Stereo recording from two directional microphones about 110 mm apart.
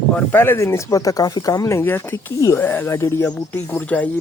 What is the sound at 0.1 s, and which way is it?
Speech, 20° left (ahead or behind).